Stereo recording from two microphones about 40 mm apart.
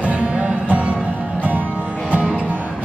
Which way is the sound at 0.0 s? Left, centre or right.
Right.